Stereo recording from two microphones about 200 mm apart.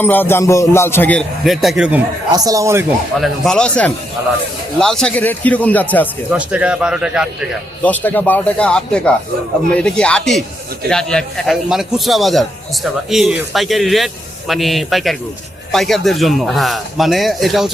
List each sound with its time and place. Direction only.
0.0 s a man's voice: 10° left (ahead or behind)
2.3 s a man's voice: 20° right (ahead or behind)
3.2 s a man's voice: centre (ahead or behind)
6.3 s a man's voice: 5° right (ahead or behind)
7.8 s a man's voice: 10° left (ahead or behind)